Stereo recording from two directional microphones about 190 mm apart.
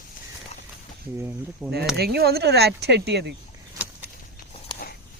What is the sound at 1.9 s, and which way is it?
Speech, 55° right (ahead or behind).